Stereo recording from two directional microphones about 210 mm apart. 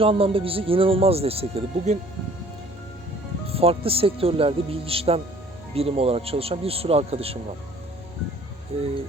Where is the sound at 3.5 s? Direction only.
30° right (ahead or behind).